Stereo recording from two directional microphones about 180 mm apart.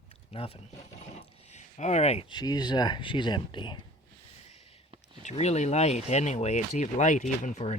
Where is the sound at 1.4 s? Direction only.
40° left (ahead or behind).